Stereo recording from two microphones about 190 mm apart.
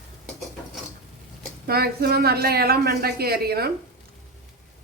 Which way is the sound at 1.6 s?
55° right (ahead or behind).